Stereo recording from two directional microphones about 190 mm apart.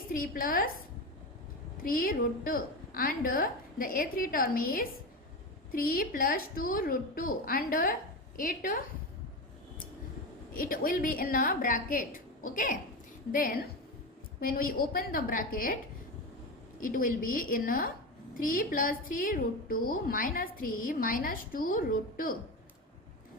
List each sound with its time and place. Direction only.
0.1 s a woman's voice: 50° left (ahead or behind)
1.8 s a woman's voice: 50° left (ahead or behind)
10.5 s a woman's voice: 50° left (ahead or behind)
16.8 s a woman's voice: 45° left (ahead or behind)